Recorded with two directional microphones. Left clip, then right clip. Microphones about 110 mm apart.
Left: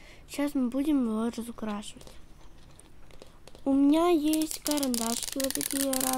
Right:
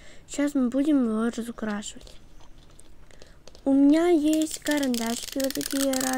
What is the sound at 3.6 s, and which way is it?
Speech, 5° right (ahead or behind).